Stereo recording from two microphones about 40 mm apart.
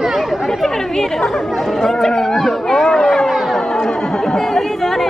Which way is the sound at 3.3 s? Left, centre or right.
Centre.